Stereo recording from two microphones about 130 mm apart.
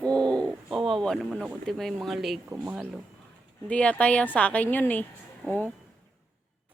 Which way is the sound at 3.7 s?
10° left (ahead or behind).